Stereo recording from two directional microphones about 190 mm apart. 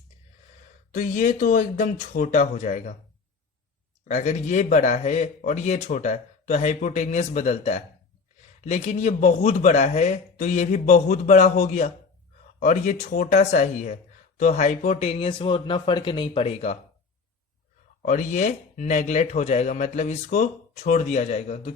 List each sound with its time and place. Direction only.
0.9 s speech: 45° left (ahead or behind)
4.1 s speech: 40° left (ahead or behind)
18.0 s speech: 40° left (ahead or behind)